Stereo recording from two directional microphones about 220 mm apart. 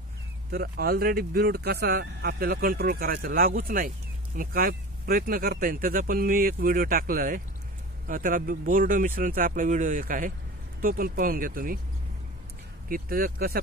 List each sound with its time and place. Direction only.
0.5 s speech: 45° right (ahead or behind)
12.8 s speech: 40° right (ahead or behind)